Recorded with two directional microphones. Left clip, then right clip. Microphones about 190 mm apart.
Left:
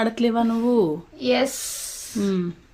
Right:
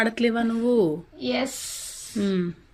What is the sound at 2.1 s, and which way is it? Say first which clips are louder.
Speech: left 1 dB; 5° left (ahead or behind).